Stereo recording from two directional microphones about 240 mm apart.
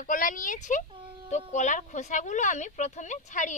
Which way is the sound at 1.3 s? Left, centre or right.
Left.